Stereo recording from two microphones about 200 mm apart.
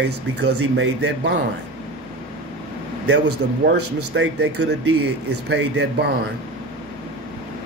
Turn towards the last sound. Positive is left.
turn(degrees=-55)  # may be behind; listen again after turning